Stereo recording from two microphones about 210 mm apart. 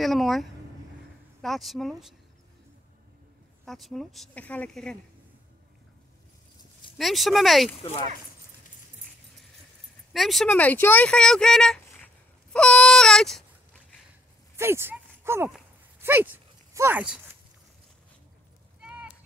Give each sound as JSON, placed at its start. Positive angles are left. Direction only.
{"t": 0.0, "sound": "speech", "side_deg": 0}
{"t": 3.6, "sound": "speech", "side_deg": 0}
{"t": 7.0, "sound": "speech", "side_deg": 0}
{"t": 7.8, "sound": "speech", "side_deg": 25}
{"t": 10.1, "sound": "speech", "side_deg": 0}
{"t": 12.5, "sound": "a sound", "side_deg": 5}
{"t": 14.6, "sound": "speech", "side_deg": -10}
{"t": 15.5, "sound": "a sound", "side_deg": -10}
{"t": 18.8, "sound": "a sound", "side_deg": -5}